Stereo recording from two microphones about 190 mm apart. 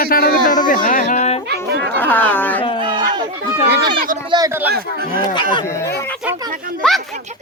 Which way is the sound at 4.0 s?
45° right (ahead or behind).